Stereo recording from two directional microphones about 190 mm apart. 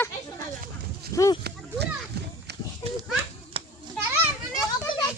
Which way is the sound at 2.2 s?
55° right (ahead or behind).